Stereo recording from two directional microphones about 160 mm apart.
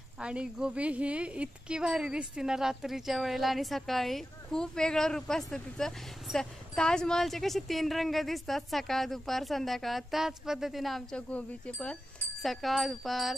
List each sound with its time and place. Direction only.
0.2 s speech: 5° right (ahead or behind)